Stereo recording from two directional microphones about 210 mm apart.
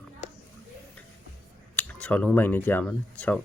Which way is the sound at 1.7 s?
5° left (ahead or behind).